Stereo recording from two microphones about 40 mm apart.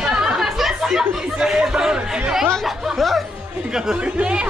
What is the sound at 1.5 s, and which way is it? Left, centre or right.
Speech, centre.